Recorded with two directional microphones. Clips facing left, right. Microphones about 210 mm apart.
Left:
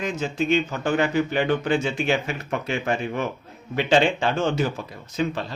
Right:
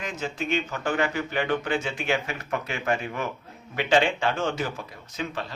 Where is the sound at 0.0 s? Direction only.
25° left (ahead or behind).